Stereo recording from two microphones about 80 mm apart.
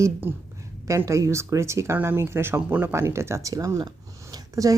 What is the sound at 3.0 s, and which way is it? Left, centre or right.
Speech, right.